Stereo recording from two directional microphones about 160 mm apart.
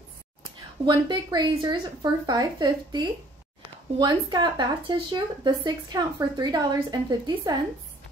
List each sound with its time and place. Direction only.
0.8 s speech: 30° right (ahead or behind)